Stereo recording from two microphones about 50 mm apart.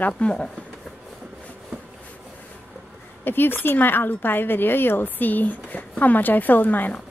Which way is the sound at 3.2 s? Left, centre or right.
Left.